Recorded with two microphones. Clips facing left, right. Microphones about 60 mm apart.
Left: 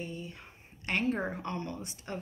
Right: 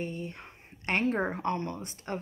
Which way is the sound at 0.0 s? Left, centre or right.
Right.